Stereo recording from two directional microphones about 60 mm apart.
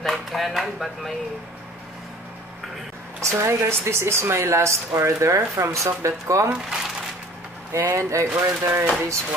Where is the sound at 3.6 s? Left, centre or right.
Right.